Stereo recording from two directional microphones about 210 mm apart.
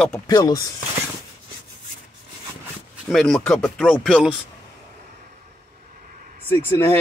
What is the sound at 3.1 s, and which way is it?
Speech, centre (ahead or behind).